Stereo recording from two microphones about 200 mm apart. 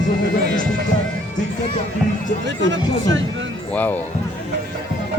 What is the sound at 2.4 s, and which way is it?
Speech, 65° right (ahead or behind).